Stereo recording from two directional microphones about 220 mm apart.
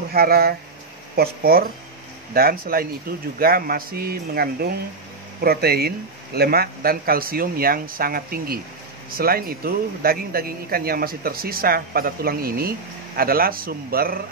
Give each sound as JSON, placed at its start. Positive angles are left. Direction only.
{"t": 0.1, "sound": "speech", "side_deg": -45}